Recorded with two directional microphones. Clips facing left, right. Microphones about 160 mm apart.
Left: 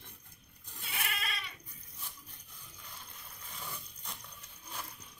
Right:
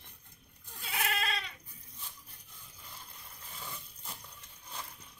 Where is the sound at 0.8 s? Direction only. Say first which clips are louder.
Right 6 dB; 90° right.